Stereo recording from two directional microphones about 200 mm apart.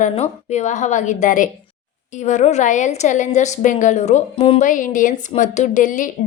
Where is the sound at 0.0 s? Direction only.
35° left (ahead or behind).